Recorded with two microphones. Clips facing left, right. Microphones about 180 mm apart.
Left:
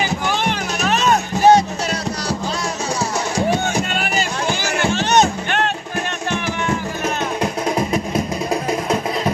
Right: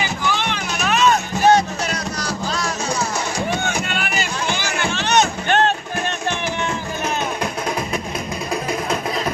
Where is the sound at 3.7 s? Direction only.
40° left (ahead or behind).